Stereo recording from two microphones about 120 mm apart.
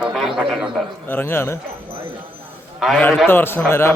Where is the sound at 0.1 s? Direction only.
Centre (ahead or behind).